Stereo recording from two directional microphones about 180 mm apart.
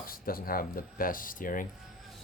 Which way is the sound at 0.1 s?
55° left (ahead or behind).